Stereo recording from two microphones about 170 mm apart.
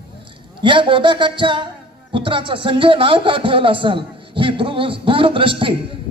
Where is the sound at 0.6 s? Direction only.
30° right (ahead or behind).